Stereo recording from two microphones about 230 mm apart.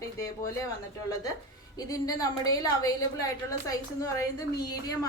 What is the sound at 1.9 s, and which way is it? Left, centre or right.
A woman's voice, centre.